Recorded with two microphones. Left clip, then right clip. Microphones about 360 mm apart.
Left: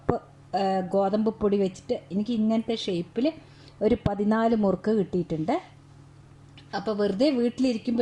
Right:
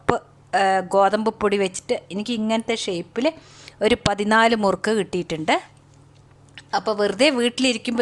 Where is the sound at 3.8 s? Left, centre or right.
Right.